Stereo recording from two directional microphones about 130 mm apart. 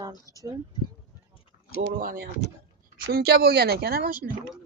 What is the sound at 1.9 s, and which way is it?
Speech, 90° right.